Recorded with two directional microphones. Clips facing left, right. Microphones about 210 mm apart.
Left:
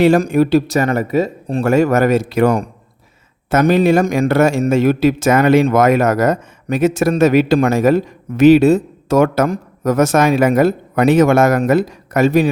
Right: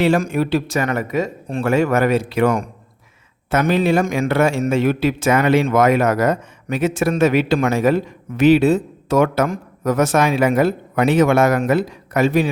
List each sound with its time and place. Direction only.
0.0 s a man's voice: 40° left (ahead or behind)